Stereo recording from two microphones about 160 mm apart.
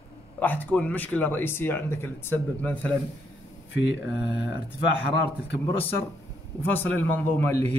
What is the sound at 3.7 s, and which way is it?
Speech, 90° left.